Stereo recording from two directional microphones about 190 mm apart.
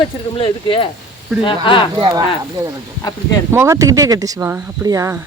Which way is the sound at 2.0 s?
20° right (ahead or behind).